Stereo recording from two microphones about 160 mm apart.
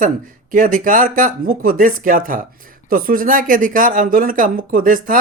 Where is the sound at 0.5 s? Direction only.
55° right (ahead or behind).